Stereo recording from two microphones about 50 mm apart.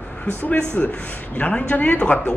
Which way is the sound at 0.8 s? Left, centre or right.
Left.